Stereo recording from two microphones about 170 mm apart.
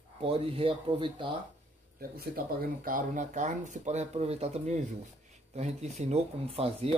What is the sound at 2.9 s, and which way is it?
Speech, 50° right (ahead or behind).